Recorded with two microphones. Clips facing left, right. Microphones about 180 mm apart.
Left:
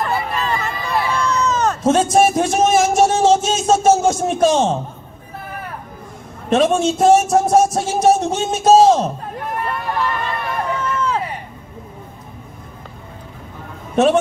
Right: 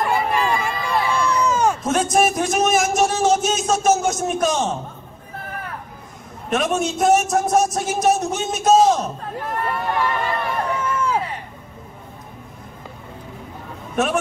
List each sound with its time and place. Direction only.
0.0 s a sound: 10° right (ahead or behind)
1.8 s speech: 30° left (ahead or behind)
6.5 s speech: 30° left (ahead or behind)
9.7 s run: 10° right (ahead or behind)
10.8 s hubbub: 10° right (ahead or behind)